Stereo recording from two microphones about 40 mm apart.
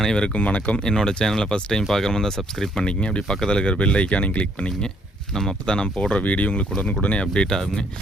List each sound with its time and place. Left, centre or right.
0.0 s speech: centre
0.3 s speech: left
0.9 s speech: centre; by 4.7 s left
5.3 s speech: centre
6.2 s speech: left
7.5 s speech: centre